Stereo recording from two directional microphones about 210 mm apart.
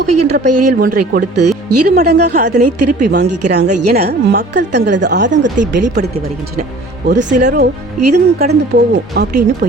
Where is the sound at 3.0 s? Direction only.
50° right (ahead or behind).